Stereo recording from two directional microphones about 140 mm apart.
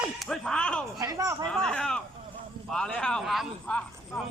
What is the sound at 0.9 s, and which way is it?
Speech, 25° right (ahead or behind).